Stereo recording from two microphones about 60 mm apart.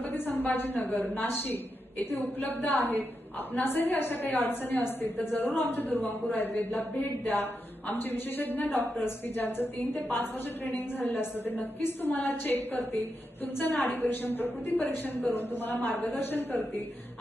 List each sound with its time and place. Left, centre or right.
0.0 s a woman's voice: left